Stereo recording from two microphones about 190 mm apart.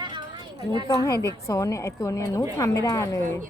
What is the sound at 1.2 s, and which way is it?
A woman's voice, 15° left (ahead or behind).